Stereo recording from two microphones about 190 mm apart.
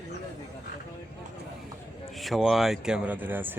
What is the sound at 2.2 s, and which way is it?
A man's voice, centre (ahead or behind).